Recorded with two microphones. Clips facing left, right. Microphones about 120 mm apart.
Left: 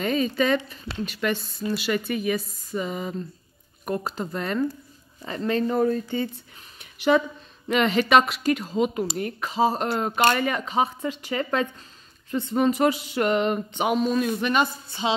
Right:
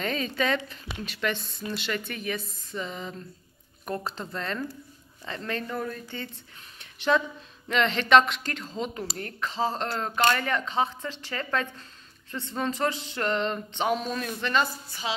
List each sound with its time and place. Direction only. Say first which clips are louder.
0.0 s speech: left 5 dB; 5° left (ahead or behind)
5.5 s speech: left 10 dB; 25° left (ahead or behind)
6.8 s speech: left 4 dB; 10° left (ahead or behind)